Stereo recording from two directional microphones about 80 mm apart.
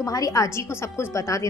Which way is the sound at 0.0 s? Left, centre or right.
Left.